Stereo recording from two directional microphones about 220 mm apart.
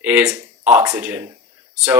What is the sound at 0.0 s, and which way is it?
Speech, 5° right (ahead or behind).